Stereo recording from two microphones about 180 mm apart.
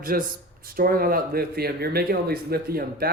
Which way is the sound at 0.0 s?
55° right (ahead or behind).